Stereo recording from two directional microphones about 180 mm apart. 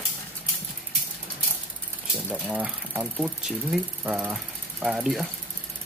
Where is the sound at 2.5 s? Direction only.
5° right (ahead or behind).